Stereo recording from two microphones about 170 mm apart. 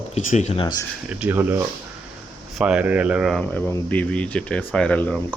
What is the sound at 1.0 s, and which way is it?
Speech, 10° right (ahead or behind).